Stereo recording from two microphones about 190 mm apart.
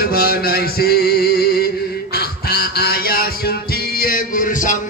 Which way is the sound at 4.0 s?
45° left (ahead or behind).